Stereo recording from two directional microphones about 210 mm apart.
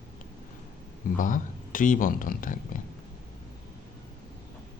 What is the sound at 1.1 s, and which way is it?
Speech, 40° left (ahead or behind).